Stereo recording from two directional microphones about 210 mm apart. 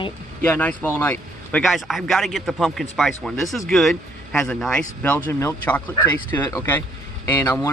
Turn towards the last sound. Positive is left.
turn(degrees=10)  # may be behind; listen again after turning